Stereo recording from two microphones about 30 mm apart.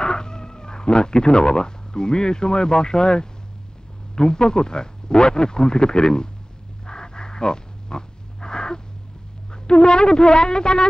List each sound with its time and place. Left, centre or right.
0.0 s a man's voice: left
6.9 s wild animals: left
9.5 s a man's voice: left